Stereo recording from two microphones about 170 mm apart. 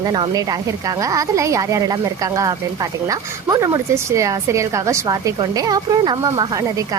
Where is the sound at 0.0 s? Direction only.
25° right (ahead or behind).